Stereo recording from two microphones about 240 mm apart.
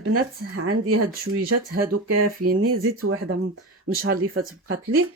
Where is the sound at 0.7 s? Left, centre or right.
Right.